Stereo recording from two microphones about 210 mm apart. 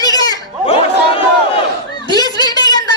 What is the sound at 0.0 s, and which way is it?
Chatter, 20° left (ahead or behind).